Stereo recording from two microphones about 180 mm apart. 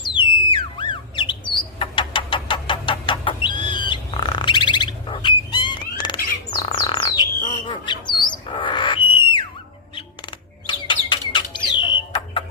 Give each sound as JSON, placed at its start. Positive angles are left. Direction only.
{"t": 0.0, "sound": "bird", "side_deg": 25}
{"t": 7.7, "sound": "squawk", "side_deg": 25}
{"t": 10.7, "sound": "bird", "side_deg": 25}